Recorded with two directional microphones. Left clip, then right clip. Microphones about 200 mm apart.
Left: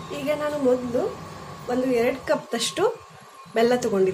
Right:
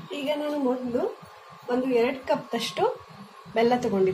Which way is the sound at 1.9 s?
20° left (ahead or behind).